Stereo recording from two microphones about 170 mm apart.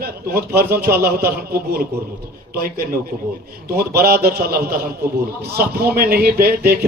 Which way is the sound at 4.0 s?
65° right (ahead or behind).